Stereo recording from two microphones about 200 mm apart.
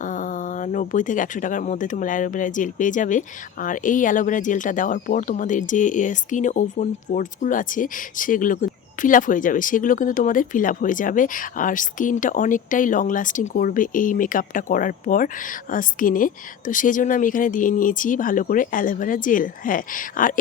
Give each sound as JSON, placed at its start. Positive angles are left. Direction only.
{"t": 0.0, "sound": "a woman's voice", "side_deg": 40}